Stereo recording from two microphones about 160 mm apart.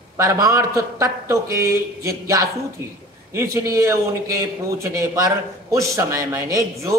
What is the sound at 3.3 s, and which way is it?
A man's voice, 15° right (ahead or behind).